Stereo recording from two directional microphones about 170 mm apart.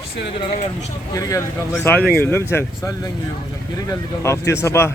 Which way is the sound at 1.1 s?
20° left (ahead or behind).